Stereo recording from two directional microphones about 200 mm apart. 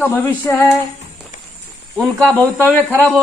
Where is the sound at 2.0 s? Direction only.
15° right (ahead or behind).